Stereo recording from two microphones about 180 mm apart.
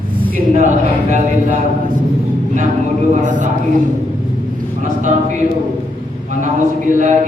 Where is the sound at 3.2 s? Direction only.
45° right (ahead or behind).